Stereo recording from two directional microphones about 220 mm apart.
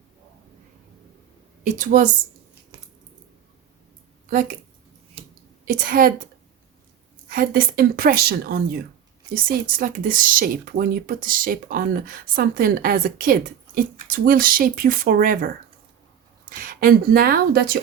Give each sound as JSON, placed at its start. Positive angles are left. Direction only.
{"t": 1.6, "sound": "speech", "side_deg": -35}
{"t": 4.3, "sound": "speech", "side_deg": -40}
{"t": 5.6, "sound": "speech", "side_deg": -40}
{"t": 7.3, "sound": "a woman's voice", "side_deg": -40}
{"t": 16.5, "sound": "a woman's voice", "side_deg": -40}